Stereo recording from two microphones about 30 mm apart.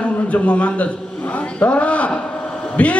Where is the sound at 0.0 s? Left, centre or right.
Left.